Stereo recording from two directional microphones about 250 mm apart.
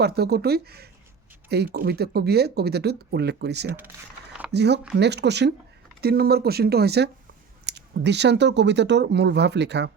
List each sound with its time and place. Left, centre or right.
0.0 s speech: right